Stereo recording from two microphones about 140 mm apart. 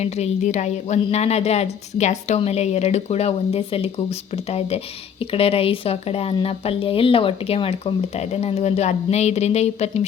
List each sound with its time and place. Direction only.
0.0 s speech: 55° left (ahead or behind)